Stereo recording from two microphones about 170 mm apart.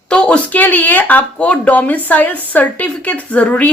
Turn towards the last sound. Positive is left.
turn(degrees=10)  # may be behind; listen again after turning